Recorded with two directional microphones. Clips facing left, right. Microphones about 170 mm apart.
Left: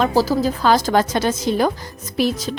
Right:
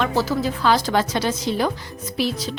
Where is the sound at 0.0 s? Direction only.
35° left (ahead or behind).